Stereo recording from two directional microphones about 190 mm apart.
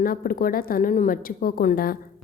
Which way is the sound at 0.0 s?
50° left (ahead or behind).